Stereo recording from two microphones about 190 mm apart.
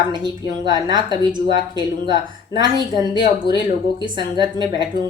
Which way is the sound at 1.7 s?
20° right (ahead or behind).